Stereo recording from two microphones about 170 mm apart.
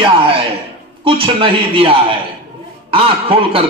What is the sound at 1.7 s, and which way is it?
A man's voice, 30° right (ahead or behind).